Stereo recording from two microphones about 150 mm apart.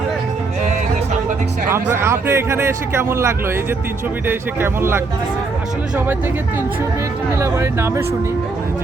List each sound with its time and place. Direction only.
1.7 s speech: 15° right (ahead or behind)
7.3 s speech: 15° right (ahead or behind)